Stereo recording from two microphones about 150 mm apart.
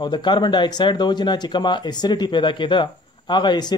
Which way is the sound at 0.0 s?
30° left (ahead or behind).